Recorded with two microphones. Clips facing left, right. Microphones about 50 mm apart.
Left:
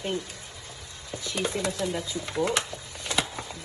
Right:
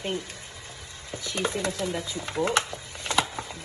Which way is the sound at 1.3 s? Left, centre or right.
Right.